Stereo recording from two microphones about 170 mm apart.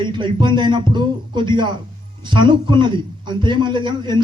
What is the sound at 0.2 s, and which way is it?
Speech, 25° right (ahead or behind).